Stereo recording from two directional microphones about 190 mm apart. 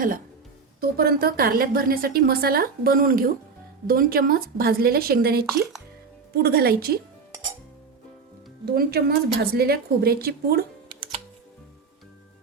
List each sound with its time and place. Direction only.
0.8 s a woman's voice: 50° right (ahead or behind)
8.6 s speech: 55° right (ahead or behind)